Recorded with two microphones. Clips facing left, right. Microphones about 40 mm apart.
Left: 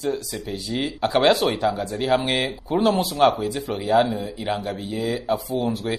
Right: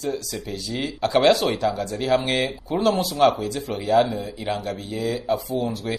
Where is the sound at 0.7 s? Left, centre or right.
Left.